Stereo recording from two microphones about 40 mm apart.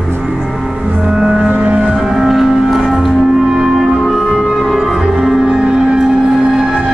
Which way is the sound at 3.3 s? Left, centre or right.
Centre.